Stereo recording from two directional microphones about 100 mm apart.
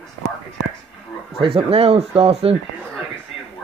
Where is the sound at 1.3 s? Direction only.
65° right (ahead or behind).